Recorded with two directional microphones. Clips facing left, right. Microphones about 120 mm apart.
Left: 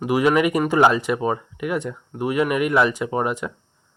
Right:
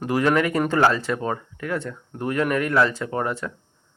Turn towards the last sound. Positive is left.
turn(degrees=15)  # may be behind; listen again after turning